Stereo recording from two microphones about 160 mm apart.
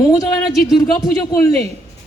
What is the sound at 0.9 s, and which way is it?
Speech, 25° left (ahead or behind).